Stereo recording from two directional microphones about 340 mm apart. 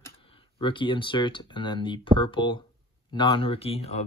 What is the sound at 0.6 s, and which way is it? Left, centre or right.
Speech, centre.